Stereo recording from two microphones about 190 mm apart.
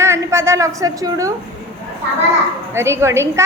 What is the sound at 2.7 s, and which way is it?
Speech, 15° right (ahead or behind).